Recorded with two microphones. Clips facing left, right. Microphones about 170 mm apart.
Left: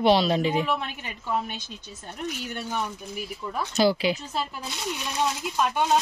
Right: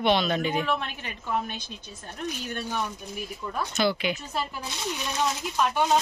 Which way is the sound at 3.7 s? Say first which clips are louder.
Left 5 dB; 35° left (ahead or behind).